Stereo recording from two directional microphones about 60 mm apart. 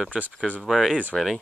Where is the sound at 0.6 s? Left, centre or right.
Centre.